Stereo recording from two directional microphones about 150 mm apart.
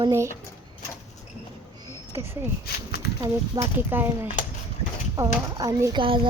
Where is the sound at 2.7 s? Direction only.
90° left.